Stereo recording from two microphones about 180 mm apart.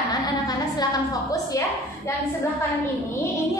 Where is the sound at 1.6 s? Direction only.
20° left (ahead or behind).